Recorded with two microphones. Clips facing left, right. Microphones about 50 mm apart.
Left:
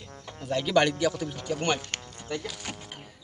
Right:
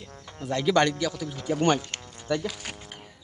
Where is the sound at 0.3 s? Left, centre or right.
Centre.